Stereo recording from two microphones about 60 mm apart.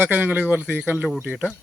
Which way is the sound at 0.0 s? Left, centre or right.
Right.